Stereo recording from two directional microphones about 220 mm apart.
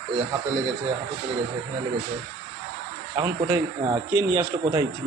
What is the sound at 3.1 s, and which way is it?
Speech, 20° right (ahead or behind).